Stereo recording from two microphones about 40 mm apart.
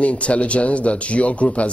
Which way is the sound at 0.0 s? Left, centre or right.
Left.